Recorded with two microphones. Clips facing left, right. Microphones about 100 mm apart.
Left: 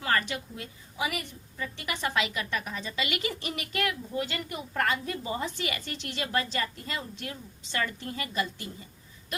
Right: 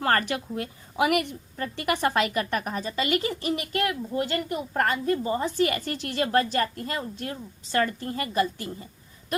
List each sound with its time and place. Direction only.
0.0 s a woman's voice: 50° right (ahead or behind)